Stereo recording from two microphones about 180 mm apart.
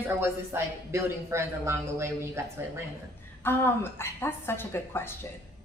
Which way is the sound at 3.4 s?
10° left (ahead or behind).